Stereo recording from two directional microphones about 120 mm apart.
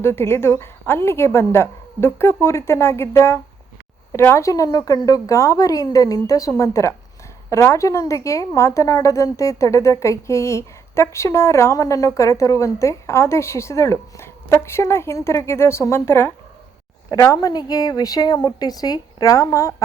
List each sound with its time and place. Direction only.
0.0 s a woman's voice: 20° left (ahead or behind)